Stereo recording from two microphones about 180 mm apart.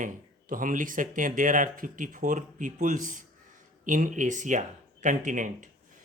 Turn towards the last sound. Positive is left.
turn(degrees=-45)  # may be behind; listen again after turning